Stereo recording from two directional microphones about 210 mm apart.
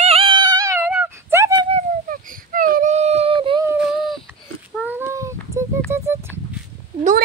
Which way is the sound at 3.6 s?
5° right (ahead or behind).